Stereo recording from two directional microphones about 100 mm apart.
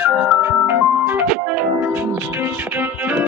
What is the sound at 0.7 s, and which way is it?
Ice cream truck, 20° right (ahead or behind).